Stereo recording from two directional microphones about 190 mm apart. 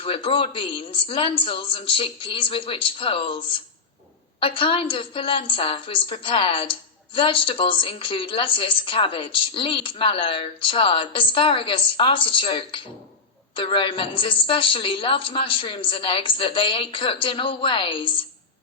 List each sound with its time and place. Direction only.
0.0 s a woman's voice: 30° left (ahead or behind)